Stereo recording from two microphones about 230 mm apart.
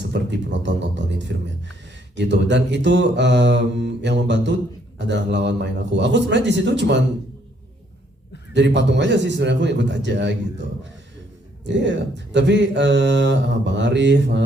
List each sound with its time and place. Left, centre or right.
0.0 s music: right
2.1 s speech: right
8.5 s speech: right
11.6 s speech: right